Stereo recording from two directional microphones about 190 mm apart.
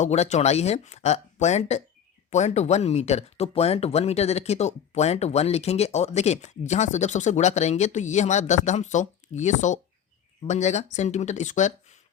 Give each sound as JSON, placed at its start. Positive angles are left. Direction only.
{"t": 0.0, "sound": "speech", "side_deg": 35}